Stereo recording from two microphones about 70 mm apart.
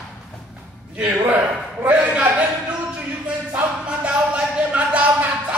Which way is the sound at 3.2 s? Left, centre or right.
Centre.